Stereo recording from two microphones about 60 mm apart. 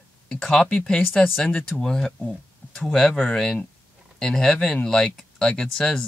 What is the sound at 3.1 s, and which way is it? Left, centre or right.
Speech, centre.